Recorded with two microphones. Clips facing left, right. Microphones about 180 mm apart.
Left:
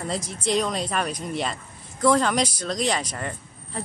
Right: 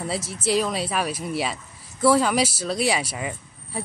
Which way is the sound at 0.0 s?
5° right (ahead or behind).